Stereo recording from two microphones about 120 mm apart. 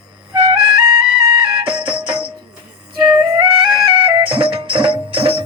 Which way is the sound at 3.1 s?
30° right (ahead or behind).